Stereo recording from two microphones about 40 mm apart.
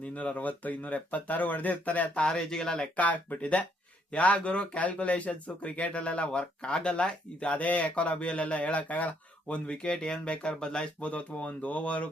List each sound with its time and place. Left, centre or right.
0.0 s speech: left
2.3 s speech: centre
2.9 s speech: left
9.6 s speech: left
11.1 s speech: left